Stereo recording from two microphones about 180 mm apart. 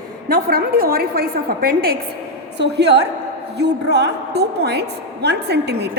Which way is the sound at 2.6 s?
70° right (ahead or behind).